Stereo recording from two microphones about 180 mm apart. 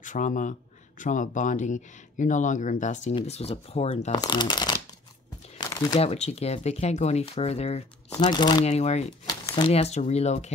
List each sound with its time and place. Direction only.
0.0 s speech: 45° left (ahead or behind)
4.1 s speech: 25° left (ahead or behind)
5.7 s crumpling: 20° left (ahead or behind)
5.9 s speech: 35° left (ahead or behind)
8.1 s speech: 25° left (ahead or behind)
8.6 s speech: 35° left (ahead or behind)